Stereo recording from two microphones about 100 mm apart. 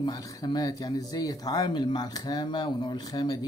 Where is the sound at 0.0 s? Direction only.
35° left (ahead or behind).